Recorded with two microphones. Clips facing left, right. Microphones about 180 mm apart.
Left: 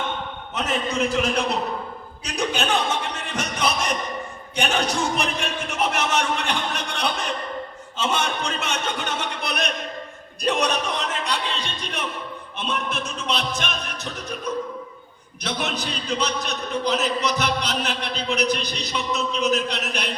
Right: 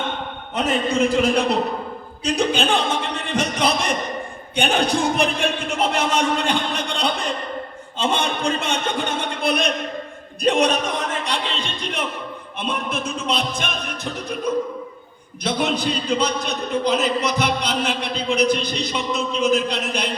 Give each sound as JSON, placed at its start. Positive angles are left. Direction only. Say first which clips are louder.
{"t": 0.5, "sound": "a man's voice", "louder": "right 5 dB", "side_deg": -55}
{"t": 2.4, "sound": "speech", "louder": "right 3 dB", "side_deg": -30}
{"t": 2.7, "sound": "music", "louder": "right 2 dB", "side_deg": -60}
{"t": 4.6, "sound": "speech", "louder": "right 4 dB", "side_deg": -30}
{"t": 4.9, "sound": "a man's voice", "louder": "right 4 dB", "side_deg": -55}
{"t": 11.2, "sound": "music", "louder": "right 1 dB", "side_deg": -30}
{"t": 11.5, "sound": "a man's voice", "louder": "right 3 dB", "side_deg": -55}
{"t": 15.4, "sound": "a man's voice", "louder": "right 6 dB", "side_deg": -55}